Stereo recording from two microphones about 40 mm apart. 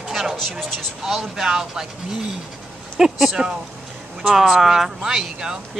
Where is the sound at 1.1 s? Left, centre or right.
Centre.